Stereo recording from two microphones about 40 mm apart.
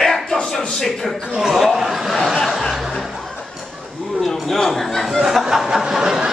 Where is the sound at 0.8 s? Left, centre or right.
Centre.